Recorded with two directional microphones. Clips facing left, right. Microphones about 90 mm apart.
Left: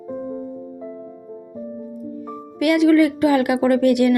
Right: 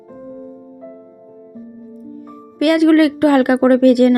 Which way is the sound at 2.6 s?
55° right (ahead or behind).